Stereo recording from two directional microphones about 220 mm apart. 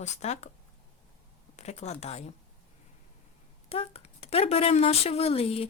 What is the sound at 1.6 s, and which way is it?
Speech, 30° left (ahead or behind).